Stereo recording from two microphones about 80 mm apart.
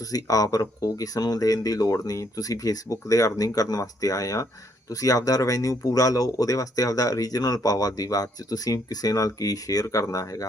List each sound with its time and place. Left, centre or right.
0.1 s speech: left